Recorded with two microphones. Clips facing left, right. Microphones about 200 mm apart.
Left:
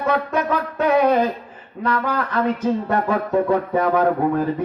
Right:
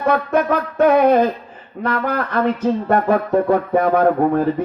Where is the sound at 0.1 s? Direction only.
50° right (ahead or behind).